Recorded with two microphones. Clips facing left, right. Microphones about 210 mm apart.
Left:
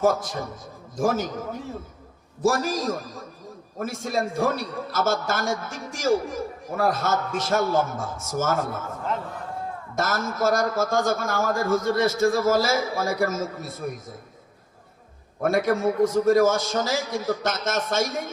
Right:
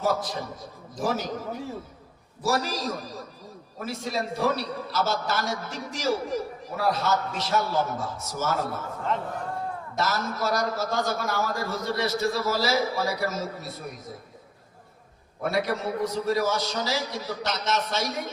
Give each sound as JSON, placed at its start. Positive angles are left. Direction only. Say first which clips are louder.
{"t": 0.0, "sound": "a man's voice", "louder": "left 4 dB", "side_deg": 50}
{"t": 2.4, "sound": "a man's voice", "louder": "left 4 dB", "side_deg": 50}
{"t": 9.9, "sound": "a man's voice", "louder": "left 2 dB", "side_deg": 50}
{"t": 15.4, "sound": "a man's voice", "louder": "left 5 dB", "side_deg": 50}